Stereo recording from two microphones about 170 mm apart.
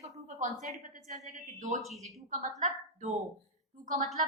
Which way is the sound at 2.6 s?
40° right (ahead or behind).